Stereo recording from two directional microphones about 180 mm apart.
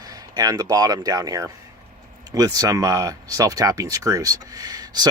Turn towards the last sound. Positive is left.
turn(degrees=-20)  # may be behind; listen again after turning